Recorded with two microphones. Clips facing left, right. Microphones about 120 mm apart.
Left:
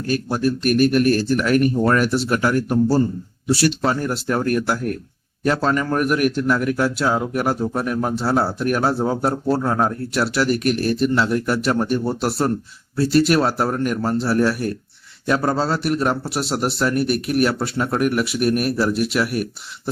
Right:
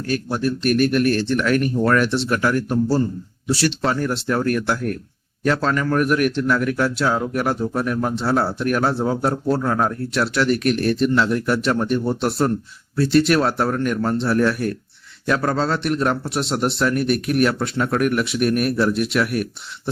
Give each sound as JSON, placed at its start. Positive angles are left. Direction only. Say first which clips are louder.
{"t": 0.3, "sound": "speech", "louder": "left 3 dB", "side_deg": 10}
{"t": 0.6, "sound": "speech", "louder": "left 1 dB", "side_deg": -40}
{"t": 1.2, "sound": "speech", "louder": "left 2 dB", "side_deg": 10}
{"t": 6.0, "sound": "speech", "louder": "even", "side_deg": 10}
{"t": 15.4, "sound": "speech", "louder": "even", "side_deg": 5}